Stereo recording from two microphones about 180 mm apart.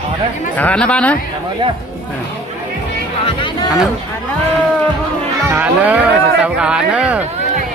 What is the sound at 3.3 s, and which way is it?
Speech, 25° left (ahead or behind).